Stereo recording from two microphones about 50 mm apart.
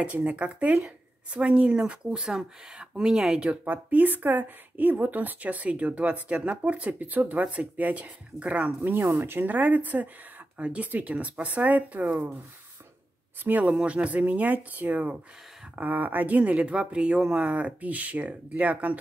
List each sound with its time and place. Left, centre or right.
0.0 s a woman's voice: right
3.4 s speech: right
8.8 s speech: right
13.4 s speech: right